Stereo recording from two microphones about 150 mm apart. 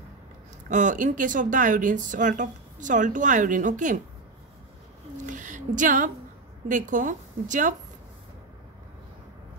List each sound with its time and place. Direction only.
0.7 s speech: 55° right (ahead or behind)
5.1 s speech: 55° right (ahead or behind)